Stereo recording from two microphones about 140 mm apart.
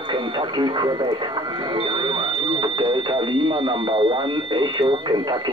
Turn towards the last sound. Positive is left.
turn(degrees=-30)  # may be behind; listen again after turning